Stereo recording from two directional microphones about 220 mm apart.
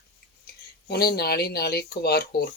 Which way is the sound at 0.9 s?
45° left (ahead or behind).